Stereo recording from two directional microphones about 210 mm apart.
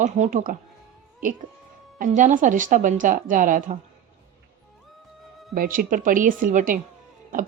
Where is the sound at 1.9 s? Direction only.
40° right (ahead or behind).